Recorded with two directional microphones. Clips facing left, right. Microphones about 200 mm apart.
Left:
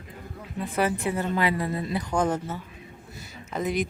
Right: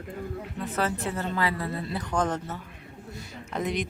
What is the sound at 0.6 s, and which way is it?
A woman's voice, 10° left (ahead or behind).